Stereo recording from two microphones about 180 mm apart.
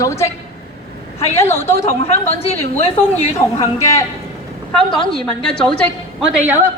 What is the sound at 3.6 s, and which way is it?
Speech, 15° left (ahead or behind).